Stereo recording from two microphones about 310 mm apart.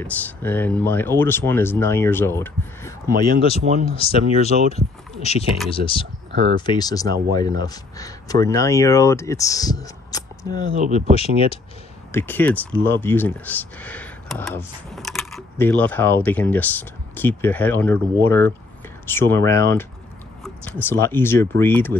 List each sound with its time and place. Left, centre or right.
0.0 s speech: centre
12.1 s speech: centre